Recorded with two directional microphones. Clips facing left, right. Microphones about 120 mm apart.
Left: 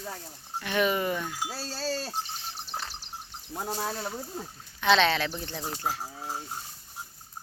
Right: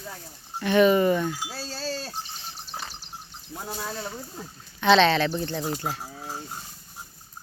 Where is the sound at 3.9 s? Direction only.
5° left (ahead or behind).